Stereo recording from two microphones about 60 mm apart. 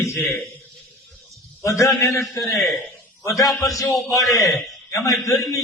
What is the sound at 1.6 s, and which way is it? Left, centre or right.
A man's voice, left.